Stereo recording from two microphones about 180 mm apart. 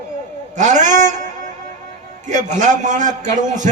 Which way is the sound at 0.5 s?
40° right (ahead or behind).